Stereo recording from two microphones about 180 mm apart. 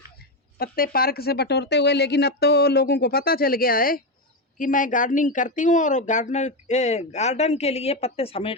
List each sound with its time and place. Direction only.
0.2 s speech: 55° left (ahead or behind); by 8.5 s 30° left (ahead or behind)